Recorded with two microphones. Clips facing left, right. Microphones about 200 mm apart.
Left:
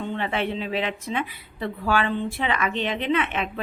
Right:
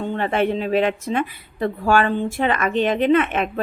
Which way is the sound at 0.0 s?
45° right (ahead or behind).